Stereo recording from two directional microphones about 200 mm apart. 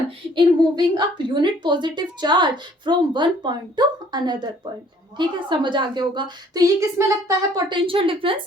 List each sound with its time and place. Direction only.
0.3 s a woman's voice: 20° right (ahead or behind)